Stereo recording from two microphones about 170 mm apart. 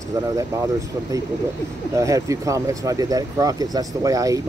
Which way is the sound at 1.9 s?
20° right (ahead or behind).